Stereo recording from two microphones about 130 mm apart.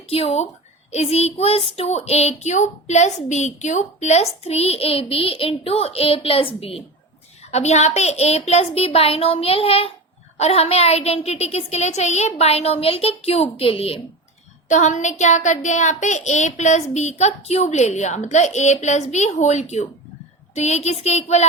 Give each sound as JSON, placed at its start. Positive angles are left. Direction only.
{"t": 0.1, "sound": "a woman's voice", "side_deg": 55}
{"t": 7.5, "sound": "a child's voice", "side_deg": 60}
{"t": 14.7, "sound": "a woman's voice", "side_deg": 70}